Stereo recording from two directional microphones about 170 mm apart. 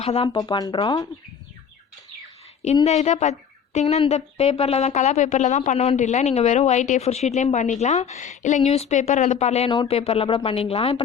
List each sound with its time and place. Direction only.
0.0 s speech: 35° left (ahead or behind)
0.3 s speech: 25° left (ahead or behind)
2.8 s speech: 40° left (ahead or behind)